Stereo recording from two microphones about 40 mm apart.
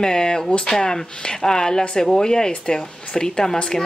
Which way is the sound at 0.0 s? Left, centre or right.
Centre.